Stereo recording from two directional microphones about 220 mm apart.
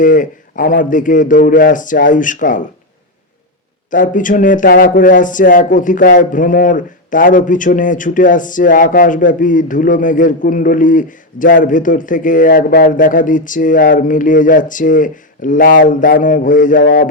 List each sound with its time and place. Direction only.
0.0 s speech: 35° left (ahead or behind)
3.8 s speech: 35° left (ahead or behind)